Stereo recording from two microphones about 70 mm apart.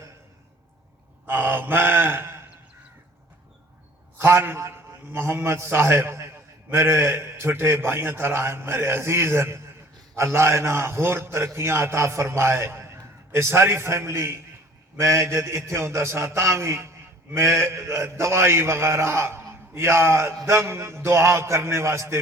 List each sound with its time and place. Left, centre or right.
1.3 s mantra: right
4.2 s a man's voice: right